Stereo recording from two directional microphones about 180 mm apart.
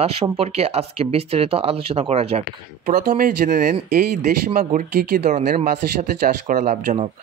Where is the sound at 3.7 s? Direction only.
40° right (ahead or behind).